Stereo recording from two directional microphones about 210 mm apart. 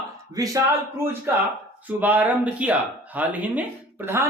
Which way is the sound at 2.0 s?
10° right (ahead or behind).